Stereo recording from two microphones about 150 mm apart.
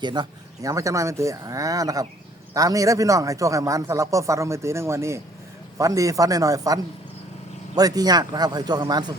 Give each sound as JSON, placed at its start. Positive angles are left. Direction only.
{"t": 0.0, "sound": "speech", "side_deg": -30}
{"t": 7.8, "sound": "speech", "side_deg": -25}